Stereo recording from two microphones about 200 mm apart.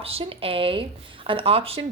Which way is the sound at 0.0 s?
30° right (ahead or behind).